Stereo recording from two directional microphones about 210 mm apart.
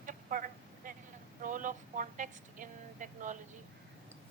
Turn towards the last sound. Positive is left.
turn(degrees=-40)  # may be behind; listen again after turning